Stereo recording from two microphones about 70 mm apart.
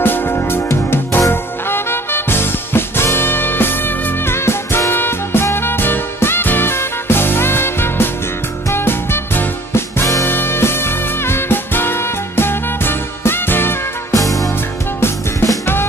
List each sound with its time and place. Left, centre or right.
0.0 s music: left
14.1 s music: left
15.6 s drum: left